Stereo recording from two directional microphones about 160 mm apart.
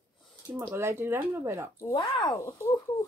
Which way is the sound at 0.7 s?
15° right (ahead or behind).